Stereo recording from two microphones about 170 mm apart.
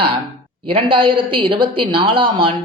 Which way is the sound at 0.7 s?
30° right (ahead or behind).